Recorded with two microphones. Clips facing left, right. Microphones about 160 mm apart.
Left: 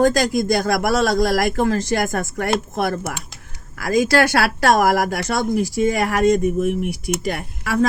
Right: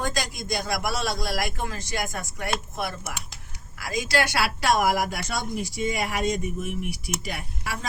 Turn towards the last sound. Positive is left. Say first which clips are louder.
# left 14 dB
turn(degrees=55)  # may be behind; listen again after turning